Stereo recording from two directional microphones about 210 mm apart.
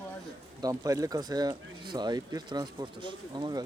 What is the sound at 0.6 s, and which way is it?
Speech, 15° right (ahead or behind).